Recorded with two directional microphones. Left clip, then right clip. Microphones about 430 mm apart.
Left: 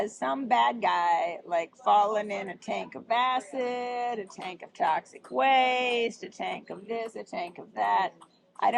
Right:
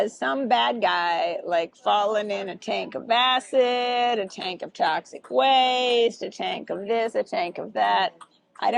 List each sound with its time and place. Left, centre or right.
0.0 s speech: right